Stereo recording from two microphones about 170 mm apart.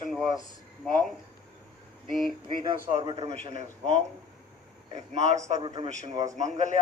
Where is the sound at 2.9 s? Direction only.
40° right (ahead or behind).